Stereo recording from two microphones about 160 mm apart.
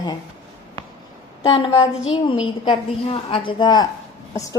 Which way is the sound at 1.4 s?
35° left (ahead or behind).